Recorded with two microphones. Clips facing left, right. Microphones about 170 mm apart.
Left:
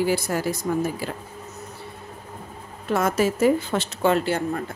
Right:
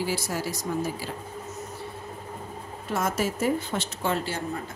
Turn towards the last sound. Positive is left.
turn(degrees=65)  # may be behind; listen again after turning